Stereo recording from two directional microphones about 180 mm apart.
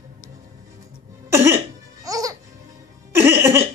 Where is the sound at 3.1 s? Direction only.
15° right (ahead or behind).